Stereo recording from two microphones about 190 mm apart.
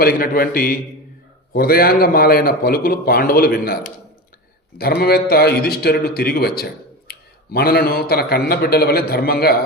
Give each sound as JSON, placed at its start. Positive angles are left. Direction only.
{"t": 0.0, "sound": "a man's voice", "side_deg": 50}
{"t": 4.8, "sound": "a man's voice", "side_deg": 55}